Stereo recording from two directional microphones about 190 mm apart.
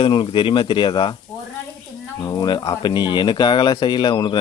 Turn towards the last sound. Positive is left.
turn(degrees=25)  # may be behind; listen again after turning